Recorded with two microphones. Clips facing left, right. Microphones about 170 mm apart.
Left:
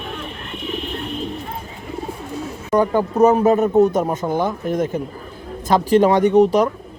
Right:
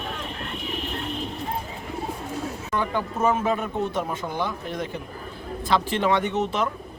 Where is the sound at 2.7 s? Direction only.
45° left (ahead or behind).